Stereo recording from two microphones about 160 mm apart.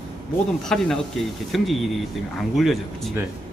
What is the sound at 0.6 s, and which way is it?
A man's voice, centre (ahead or behind).